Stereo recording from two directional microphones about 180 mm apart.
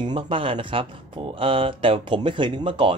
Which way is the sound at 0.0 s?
25° right (ahead or behind).